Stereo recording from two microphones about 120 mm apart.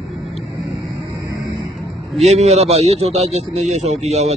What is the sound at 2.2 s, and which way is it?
A man's voice, 65° right (ahead or behind).